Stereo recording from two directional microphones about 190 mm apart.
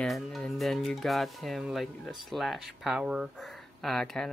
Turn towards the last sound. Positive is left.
turn(degrees=0)  # may be behind; listen again after turning